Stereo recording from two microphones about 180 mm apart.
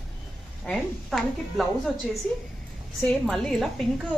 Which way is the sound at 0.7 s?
Centre (ahead or behind).